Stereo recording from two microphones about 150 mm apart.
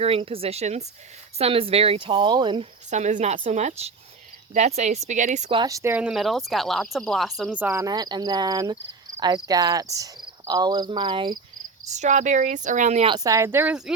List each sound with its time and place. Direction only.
0.0 s speech: 40° right (ahead or behind)
2.9 s speech: 50° right (ahead or behind)
5.6 s speech: 20° right (ahead or behind); by 7.6 s centre (ahead or behind)
7.6 s speech: 20° right (ahead or behind)
9.9 s cricket: 25° right (ahead or behind)
11.9 s speech: 50° right (ahead or behind)
13.1 s speech: 25° right (ahead or behind)